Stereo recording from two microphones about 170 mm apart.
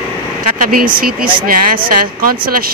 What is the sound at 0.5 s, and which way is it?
A woman's voice, 55° right (ahead or behind).